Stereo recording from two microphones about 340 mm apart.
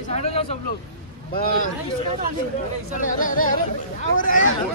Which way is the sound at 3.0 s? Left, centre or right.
Left.